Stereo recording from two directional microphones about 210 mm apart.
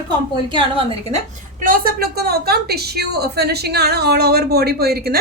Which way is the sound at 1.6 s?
45° right (ahead or behind).